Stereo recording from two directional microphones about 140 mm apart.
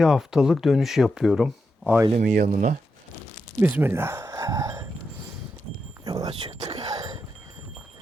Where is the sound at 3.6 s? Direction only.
15° right (ahead or behind).